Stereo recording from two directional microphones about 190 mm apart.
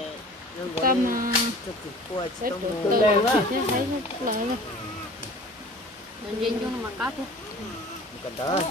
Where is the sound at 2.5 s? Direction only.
50° right (ahead or behind).